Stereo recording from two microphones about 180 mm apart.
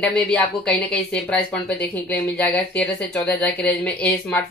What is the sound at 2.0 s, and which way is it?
Speech, 10° left (ahead or behind).